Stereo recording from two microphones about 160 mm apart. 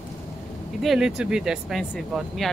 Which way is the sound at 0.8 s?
5° right (ahead or behind).